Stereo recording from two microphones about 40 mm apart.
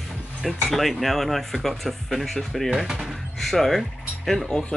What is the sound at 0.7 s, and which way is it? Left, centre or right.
Speech, centre.